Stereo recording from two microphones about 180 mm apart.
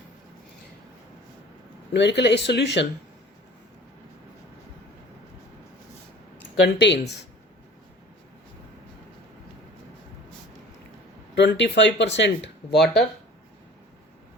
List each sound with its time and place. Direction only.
1.9 s speech: 75° left (ahead or behind)
6.6 s speech: 75° left (ahead or behind)
11.3 s speech: 75° left (ahead or behind)
12.8 s speech: 5° left (ahead or behind)